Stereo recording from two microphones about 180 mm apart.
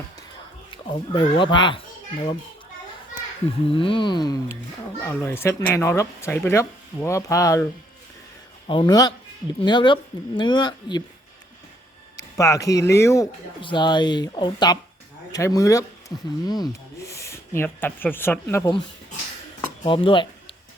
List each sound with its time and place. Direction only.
0.7 s speech: 25° left (ahead or behind)
3.7 s speech: 30° left (ahead or behind)
5.0 s speech: 10° left (ahead or behind)
8.6 s speech: 30° left (ahead or behind)
12.1 s speech: 20° left (ahead or behind)
19.8 s speech: 25° left (ahead or behind)